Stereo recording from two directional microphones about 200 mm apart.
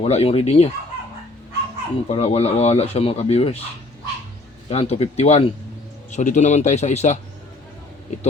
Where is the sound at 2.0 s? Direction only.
35° left (ahead or behind).